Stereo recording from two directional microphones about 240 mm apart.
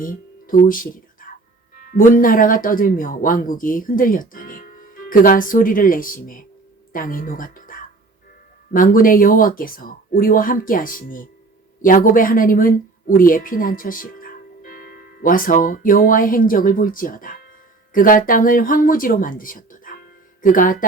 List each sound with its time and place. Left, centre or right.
0.0 s a woman's voice: left